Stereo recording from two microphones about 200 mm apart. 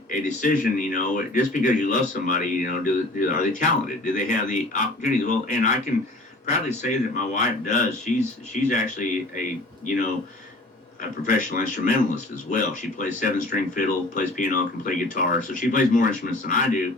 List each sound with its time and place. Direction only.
0.1 s speech: 40° left (ahead or behind)
11.3 s speech: 40° left (ahead or behind)